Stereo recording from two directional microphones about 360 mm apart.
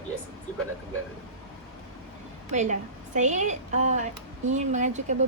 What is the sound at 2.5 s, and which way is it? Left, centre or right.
A woman's voice, centre.